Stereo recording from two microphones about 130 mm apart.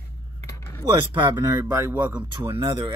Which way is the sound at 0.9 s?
35° right (ahead or behind).